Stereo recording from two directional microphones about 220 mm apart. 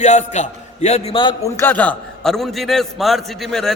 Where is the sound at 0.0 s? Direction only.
30° left (ahead or behind).